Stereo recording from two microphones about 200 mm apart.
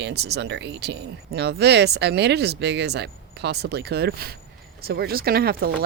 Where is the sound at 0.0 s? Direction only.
55° right (ahead or behind).